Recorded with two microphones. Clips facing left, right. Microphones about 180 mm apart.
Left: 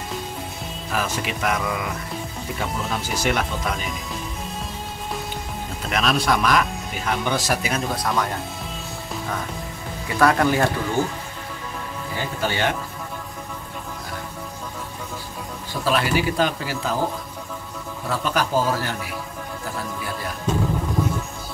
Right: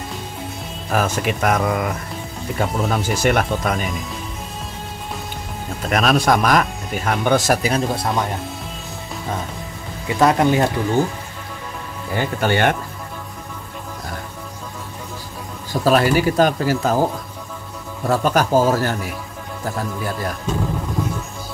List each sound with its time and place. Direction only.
0.8 s speech: 50° right (ahead or behind)
5.9 s speech: 45° right (ahead or behind)
7.9 s speech: 25° right (ahead or behind)
10.0 s speech: 20° right (ahead or behind)
12.4 s speech: 60° right (ahead or behind)
15.8 s speech: 45° right (ahead or behind)
18.0 s speech: 45° right (ahead or behind)